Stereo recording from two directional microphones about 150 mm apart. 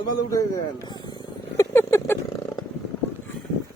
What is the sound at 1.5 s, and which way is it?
Speech, 20° left (ahead or behind).